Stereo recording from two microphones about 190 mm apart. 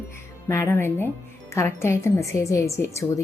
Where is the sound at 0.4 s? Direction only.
15° left (ahead or behind).